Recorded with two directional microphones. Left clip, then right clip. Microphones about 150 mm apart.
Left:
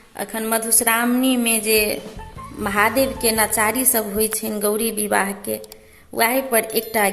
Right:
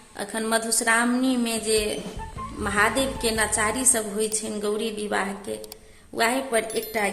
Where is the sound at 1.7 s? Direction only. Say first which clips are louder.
Left 5 dB; 25° left (ahead or behind).